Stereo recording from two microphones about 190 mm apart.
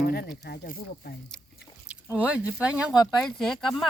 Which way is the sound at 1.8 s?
5° right (ahead or behind).